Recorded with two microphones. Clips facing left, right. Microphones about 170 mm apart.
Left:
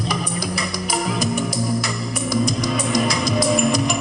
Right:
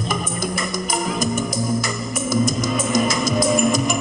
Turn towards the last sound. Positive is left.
turn(degrees=0)  # may be behind; listen again after turning